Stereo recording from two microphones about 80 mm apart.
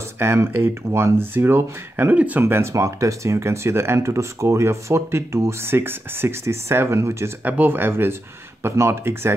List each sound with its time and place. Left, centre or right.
0.2 s speech: right
2.4 s speech: right
7.4 s speech: right